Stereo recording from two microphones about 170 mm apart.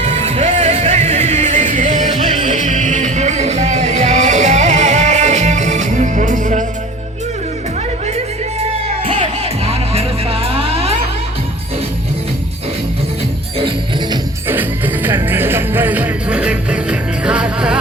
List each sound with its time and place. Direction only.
0.0 s music: 45° right (ahead or behind)
9.6 s music: 35° right (ahead or behind)
13.6 s music: 30° right (ahead or behind)
14.4 s music: 10° right (ahead or behind)